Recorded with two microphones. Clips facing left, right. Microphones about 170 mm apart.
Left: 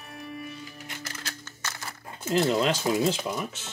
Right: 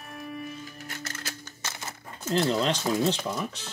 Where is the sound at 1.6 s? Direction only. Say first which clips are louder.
Left 1 dB; 20° right (ahead or behind).